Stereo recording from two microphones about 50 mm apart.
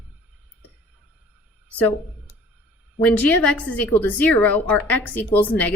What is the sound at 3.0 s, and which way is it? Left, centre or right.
A woman's voice, left.